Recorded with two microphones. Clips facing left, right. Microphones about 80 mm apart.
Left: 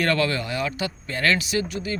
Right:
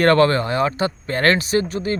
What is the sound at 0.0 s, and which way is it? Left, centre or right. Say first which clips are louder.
Speech: right 8 dB; right.